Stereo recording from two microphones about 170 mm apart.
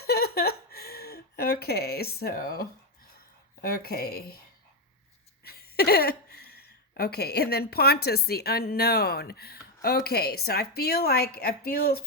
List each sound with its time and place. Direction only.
0.0 s a sound: 65° left (ahead or behind)
3.6 s speech: 65° left (ahead or behind)
5.4 s speech: 65° left (ahead or behind)